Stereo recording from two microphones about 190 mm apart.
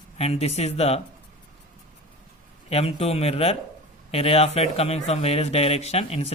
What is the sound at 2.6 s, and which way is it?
Speech, 35° left (ahead or behind).